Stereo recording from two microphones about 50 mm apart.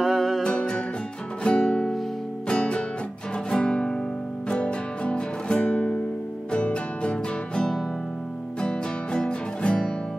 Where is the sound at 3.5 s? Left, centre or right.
Centre.